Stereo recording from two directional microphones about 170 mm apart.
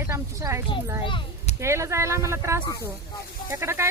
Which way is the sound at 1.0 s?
30° left (ahead or behind).